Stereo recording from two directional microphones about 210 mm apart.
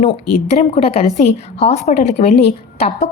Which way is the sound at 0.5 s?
30° left (ahead or behind).